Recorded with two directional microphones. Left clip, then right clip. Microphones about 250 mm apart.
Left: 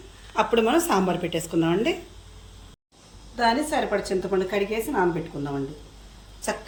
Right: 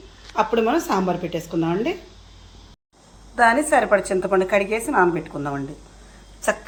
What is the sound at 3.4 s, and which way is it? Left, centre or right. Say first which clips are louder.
A woman's voice: right 6 dB; centre.